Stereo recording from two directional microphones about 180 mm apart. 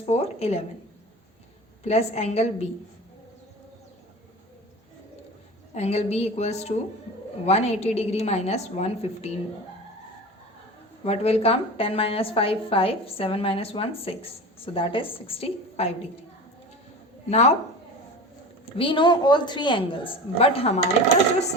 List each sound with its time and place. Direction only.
0.0 s speech: 35° left (ahead or behind)
1.8 s a woman's voice: 35° left (ahead or behind)
5.7 s a woman's voice: 35° left (ahead or behind)
11.0 s a woman's voice: 35° left (ahead or behind)
17.2 s a woman's voice: 40° left (ahead or behind)
18.8 s a woman's voice: 25° left (ahead or behind)